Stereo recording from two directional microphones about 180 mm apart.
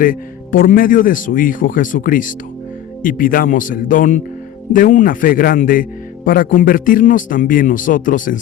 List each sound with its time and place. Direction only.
0.0 s speech: 50° left (ahead or behind)